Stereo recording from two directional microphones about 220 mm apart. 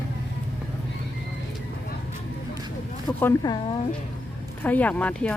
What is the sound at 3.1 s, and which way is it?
Speech, 15° left (ahead or behind).